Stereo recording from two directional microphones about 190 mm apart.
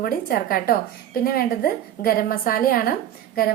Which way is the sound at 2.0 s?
50° left (ahead or behind).